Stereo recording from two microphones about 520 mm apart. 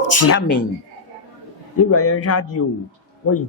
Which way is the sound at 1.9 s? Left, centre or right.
Left.